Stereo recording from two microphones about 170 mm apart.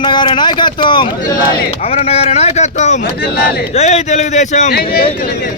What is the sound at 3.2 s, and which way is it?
Speech, 65° left (ahead or behind).